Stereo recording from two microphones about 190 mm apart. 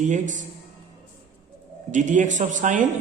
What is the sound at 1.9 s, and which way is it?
Speech, 40° right (ahead or behind).